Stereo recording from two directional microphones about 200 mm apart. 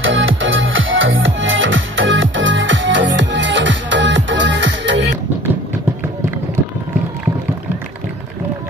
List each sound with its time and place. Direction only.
0.0 s music: 75° right (ahead or behind)